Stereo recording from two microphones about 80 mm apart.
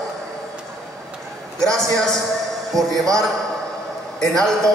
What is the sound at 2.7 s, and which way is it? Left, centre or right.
Speech, right.